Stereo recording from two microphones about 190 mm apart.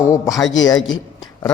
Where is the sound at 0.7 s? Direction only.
90° left.